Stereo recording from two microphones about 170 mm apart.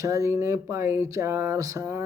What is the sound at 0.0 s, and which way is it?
Speech, 15° right (ahead or behind).